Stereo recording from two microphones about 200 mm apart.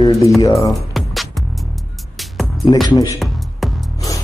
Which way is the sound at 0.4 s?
15° left (ahead or behind).